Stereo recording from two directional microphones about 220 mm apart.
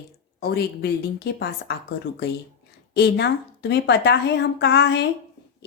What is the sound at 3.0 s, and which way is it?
Speech, 50° left (ahead or behind).